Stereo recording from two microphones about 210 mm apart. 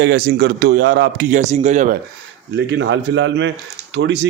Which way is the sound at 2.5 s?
55° right (ahead or behind).